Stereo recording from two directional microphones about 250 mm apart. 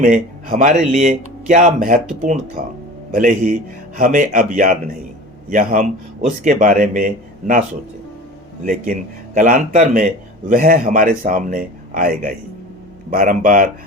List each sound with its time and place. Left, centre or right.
0.0 s speech: right
3.1 s speech: right
8.6 s speech: right